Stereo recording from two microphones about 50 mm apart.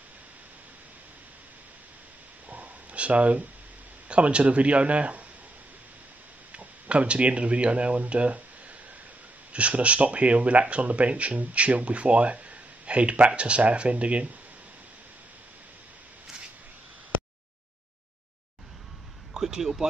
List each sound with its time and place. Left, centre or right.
2.5 s a sound: right
4.1 s speech: right
6.5 s speech: right
9.5 s speech: right
19.4 s speech: centre